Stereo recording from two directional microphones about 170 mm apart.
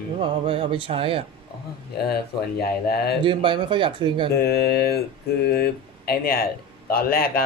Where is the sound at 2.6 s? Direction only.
65° left (ahead or behind).